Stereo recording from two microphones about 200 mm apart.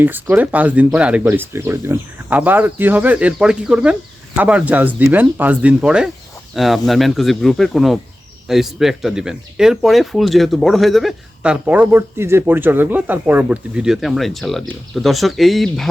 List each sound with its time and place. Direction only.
0.0 s speech: 10° right (ahead or behind)